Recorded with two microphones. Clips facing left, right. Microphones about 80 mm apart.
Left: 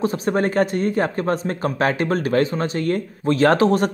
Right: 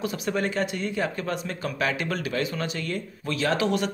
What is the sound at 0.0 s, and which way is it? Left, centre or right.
Speech, left.